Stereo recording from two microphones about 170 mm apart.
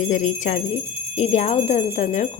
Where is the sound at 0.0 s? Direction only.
45° left (ahead or behind).